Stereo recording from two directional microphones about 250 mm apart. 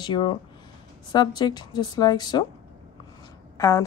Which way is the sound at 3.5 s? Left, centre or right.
Centre.